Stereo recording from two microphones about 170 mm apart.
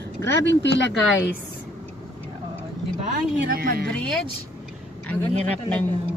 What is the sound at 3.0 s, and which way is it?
Speech, 60° right (ahead or behind).